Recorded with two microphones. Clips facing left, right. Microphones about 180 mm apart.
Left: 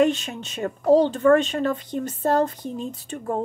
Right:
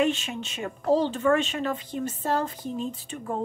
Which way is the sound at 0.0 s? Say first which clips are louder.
Left 5 dB; 40° left (ahead or behind).